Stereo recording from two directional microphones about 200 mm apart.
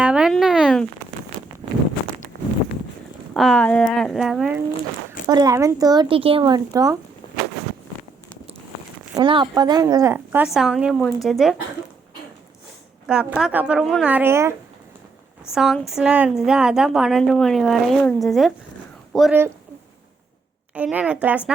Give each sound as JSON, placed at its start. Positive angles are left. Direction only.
{"t": 0.0, "sound": "a sound", "side_deg": -5}
{"t": 1.6, "sound": "a sound", "side_deg": -25}
{"t": 3.3, "sound": "a woman's voice", "side_deg": 0}
{"t": 5.3, "sound": "speech", "side_deg": -20}
{"t": 9.1, "sound": "a woman's voice", "side_deg": -25}
{"t": 13.1, "sound": "a woman's voice", "side_deg": -5}
{"t": 15.5, "sound": "a woman's voice", "side_deg": 0}
{"t": 20.7, "sound": "a woman's voice", "side_deg": -5}